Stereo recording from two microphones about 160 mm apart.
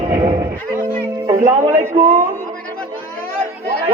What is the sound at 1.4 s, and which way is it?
Speech, 20° right (ahead or behind).